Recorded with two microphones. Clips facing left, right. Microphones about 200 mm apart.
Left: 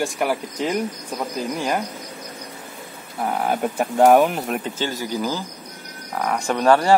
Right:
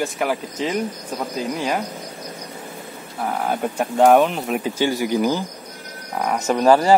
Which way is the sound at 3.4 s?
5° left (ahead or behind).